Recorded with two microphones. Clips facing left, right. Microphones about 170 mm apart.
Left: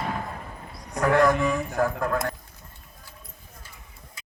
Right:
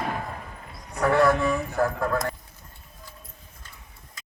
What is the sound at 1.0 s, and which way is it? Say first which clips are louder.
Speech: even; 10° right (ahead or behind).